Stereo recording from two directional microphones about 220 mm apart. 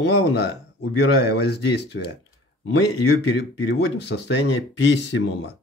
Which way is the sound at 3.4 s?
50° left (ahead or behind).